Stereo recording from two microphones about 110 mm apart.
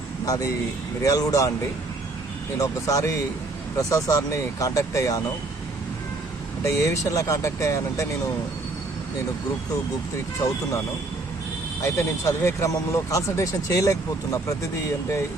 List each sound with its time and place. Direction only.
0.3 s speech: 30° left (ahead or behind)
2.6 s speech: 30° left (ahead or behind)
6.7 s speech: 30° left (ahead or behind)
11.8 s speech: 25° left (ahead or behind)